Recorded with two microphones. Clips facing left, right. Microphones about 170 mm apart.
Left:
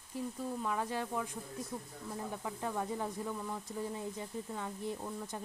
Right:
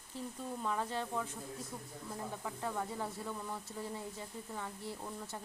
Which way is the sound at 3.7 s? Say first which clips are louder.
Left 4 dB; 15° left (ahead or behind).